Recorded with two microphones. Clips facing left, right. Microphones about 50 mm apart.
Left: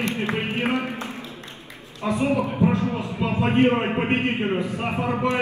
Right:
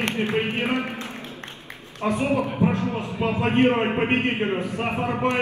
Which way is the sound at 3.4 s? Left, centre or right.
Right.